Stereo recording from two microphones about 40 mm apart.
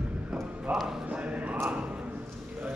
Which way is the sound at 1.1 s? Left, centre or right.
Right.